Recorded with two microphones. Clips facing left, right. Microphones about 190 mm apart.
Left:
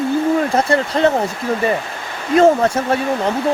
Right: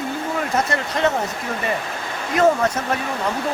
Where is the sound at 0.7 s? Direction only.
35° left (ahead or behind).